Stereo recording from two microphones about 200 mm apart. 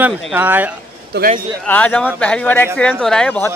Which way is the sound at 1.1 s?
55° right (ahead or behind).